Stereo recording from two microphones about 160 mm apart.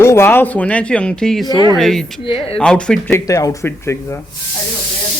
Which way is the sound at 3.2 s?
20° left (ahead or behind).